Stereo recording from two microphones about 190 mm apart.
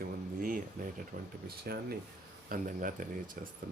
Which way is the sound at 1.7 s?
55° right (ahead or behind).